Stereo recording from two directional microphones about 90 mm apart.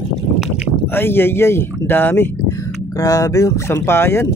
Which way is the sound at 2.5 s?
40° left (ahead or behind).